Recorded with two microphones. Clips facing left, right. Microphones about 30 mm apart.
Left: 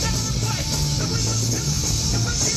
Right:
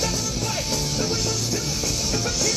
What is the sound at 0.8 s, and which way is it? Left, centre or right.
Music, centre.